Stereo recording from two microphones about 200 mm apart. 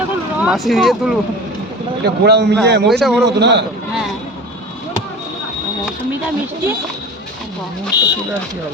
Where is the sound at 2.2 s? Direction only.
55° right (ahead or behind).